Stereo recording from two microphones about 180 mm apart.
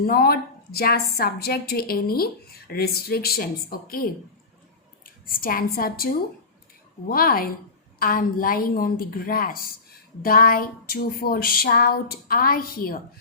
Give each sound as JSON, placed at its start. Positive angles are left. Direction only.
{"t": 0.0, "sound": "a woman's voice", "side_deg": 55}
{"t": 5.2, "sound": "a woman's voice", "side_deg": 50}